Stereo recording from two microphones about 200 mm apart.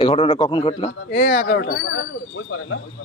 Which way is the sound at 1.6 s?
70° left (ahead or behind).